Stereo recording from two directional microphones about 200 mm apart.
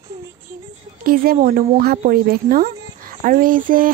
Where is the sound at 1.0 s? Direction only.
45° right (ahead or behind).